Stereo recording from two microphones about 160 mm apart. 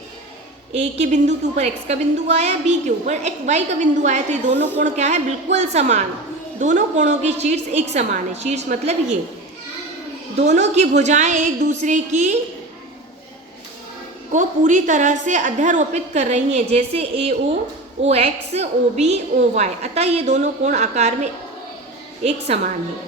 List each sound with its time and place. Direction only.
0.7 s a woman's voice: 45° right (ahead or behind)
10.3 s a woman's voice: 45° right (ahead or behind)
14.3 s a woman's voice: 50° right (ahead or behind)